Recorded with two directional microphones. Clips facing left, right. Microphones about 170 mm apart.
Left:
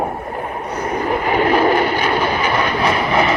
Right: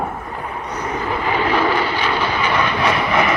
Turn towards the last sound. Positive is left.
turn(degrees=30)  # may be behind; listen again after turning